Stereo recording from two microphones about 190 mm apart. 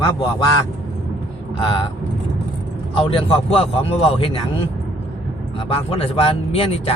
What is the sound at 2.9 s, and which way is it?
Speech, 30° left (ahead or behind).